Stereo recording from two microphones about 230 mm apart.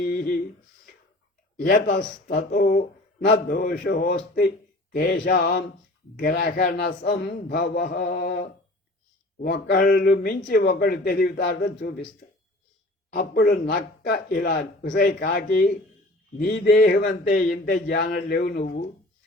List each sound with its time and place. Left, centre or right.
0.0 s a sound: left
1.5 s speech: left
13.1 s speech: left